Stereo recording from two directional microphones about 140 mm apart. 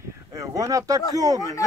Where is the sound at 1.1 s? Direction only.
25° right (ahead or behind).